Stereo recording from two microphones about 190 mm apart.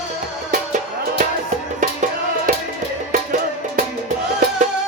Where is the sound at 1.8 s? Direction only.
45° right (ahead or behind).